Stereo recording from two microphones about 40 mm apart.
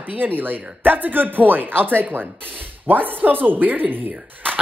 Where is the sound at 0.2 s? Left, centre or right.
Right.